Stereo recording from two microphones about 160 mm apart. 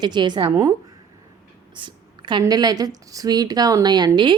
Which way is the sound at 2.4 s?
25° right (ahead or behind).